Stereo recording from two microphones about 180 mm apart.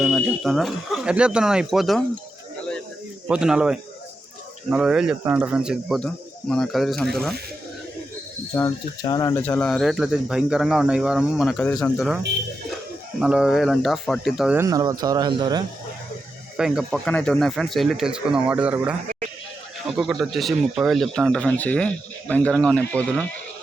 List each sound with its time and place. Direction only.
0.2 s speech: centre (ahead or behind)
3.2 s speech: 5° right (ahead or behind)
8.5 s speech: 20° left (ahead or behind); by 14.6 s 5° right (ahead or behind)
14.6 s speech: 20° right (ahead or behind)
16.6 s speech: centre (ahead or behind)